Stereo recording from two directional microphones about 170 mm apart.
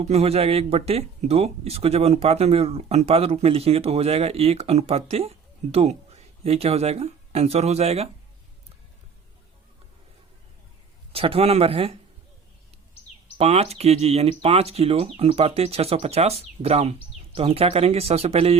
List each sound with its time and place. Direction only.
0.0 s speech: 40° right (ahead or behind)
11.1 s speech: 35° right (ahead or behind)
13.4 s speech: 35° right (ahead or behind)